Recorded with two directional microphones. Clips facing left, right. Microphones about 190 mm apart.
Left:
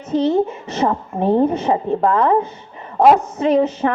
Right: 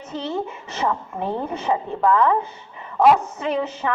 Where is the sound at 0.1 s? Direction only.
40° left (ahead or behind).